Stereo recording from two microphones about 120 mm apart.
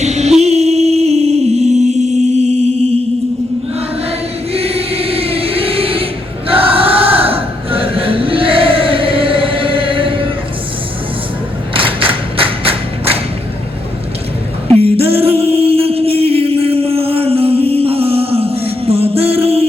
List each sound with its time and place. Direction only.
0.0 s music: 70° right (ahead or behind)
4.5 s choir: 55° right (ahead or behind)
6.5 s chant: 50° right (ahead or behind)
11.7 s thump: 50° right (ahead or behind)
14.7 s a sound: 55° right (ahead or behind)